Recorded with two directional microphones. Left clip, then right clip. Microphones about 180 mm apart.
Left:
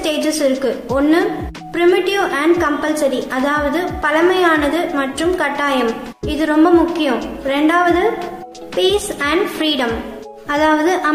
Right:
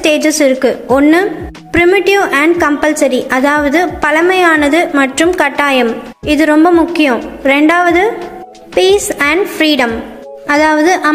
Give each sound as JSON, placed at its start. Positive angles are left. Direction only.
{"t": 0.0, "sound": "a woman's voice", "side_deg": -40}
{"t": 10.4, "sound": "music", "side_deg": -30}